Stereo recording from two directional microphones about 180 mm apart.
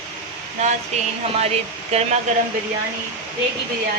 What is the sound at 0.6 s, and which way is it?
A woman's voice, 40° right (ahead or behind).